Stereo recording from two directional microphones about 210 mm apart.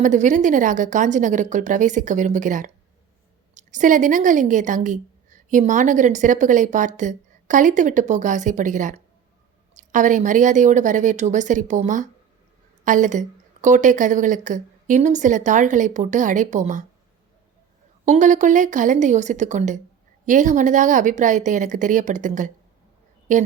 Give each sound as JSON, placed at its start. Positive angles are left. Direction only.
{"t": 0.0, "sound": "a woman's voice", "side_deg": -35}
{"t": 18.0, "sound": "a woman's voice", "side_deg": -35}